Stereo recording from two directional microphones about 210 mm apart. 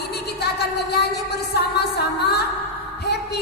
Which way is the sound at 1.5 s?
50° left (ahead or behind).